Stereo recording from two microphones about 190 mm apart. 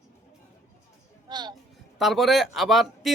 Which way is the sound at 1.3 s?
20° right (ahead or behind).